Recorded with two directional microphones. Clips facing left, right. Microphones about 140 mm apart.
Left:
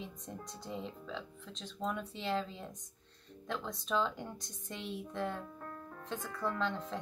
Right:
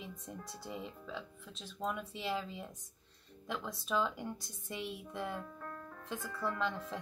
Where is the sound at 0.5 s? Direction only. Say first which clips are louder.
Left 2 dB; 5° right (ahead or behind).